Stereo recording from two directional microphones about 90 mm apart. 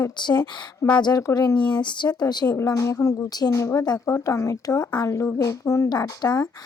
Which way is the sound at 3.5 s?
30° left (ahead or behind).